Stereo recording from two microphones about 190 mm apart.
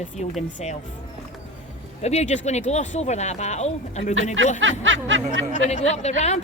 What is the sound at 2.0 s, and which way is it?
Speech, 35° left (ahead or behind).